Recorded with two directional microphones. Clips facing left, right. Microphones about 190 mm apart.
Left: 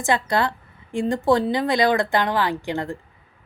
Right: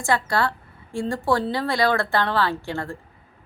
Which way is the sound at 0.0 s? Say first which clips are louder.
Left 1 dB; 20° left (ahead or behind).